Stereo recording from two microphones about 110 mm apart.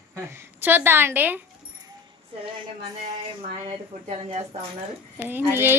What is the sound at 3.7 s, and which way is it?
Speech, 65° right (ahead or behind).